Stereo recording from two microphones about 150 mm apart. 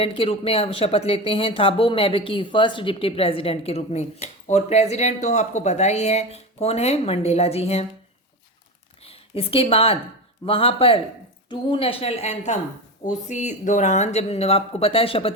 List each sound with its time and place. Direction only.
0.0 s speech: 40° left (ahead or behind)
9.0 s speech: 40° left (ahead or behind)